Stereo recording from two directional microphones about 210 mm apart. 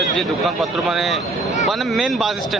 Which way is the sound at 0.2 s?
Centre (ahead or behind).